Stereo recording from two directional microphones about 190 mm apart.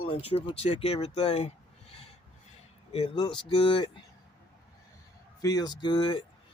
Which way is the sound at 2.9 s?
30° left (ahead or behind).